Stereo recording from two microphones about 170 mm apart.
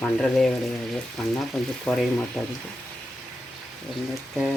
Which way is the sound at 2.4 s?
Centre (ahead or behind).